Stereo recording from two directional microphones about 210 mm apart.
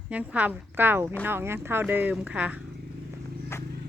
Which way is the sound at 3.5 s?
10° left (ahead or behind).